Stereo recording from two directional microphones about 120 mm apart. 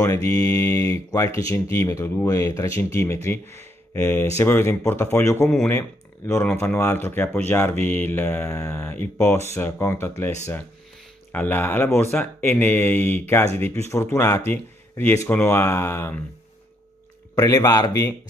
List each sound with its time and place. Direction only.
0.0 s speech: 25° left (ahead or behind)
17.4 s a man's voice: 30° left (ahead or behind)